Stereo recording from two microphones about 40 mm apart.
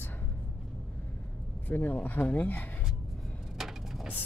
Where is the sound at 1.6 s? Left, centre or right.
Left.